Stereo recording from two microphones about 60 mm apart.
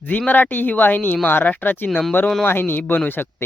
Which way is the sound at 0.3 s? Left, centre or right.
Left.